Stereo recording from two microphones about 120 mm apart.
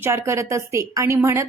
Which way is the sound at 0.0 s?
25° right (ahead or behind).